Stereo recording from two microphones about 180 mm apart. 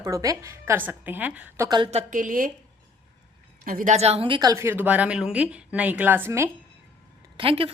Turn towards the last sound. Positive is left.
turn(degrees=-30)  # may be behind; listen again after turning